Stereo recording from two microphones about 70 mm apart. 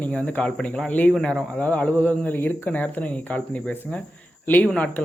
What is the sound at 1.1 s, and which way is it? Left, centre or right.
Speech, centre.